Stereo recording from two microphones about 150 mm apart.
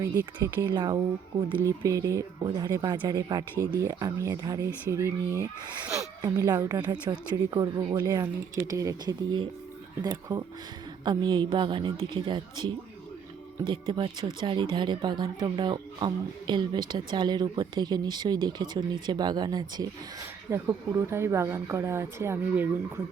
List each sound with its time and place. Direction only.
0.0 s a woman's voice: 20° right (ahead or behind)